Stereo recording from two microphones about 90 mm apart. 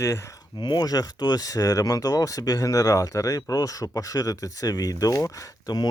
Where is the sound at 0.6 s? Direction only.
55° left (ahead or behind).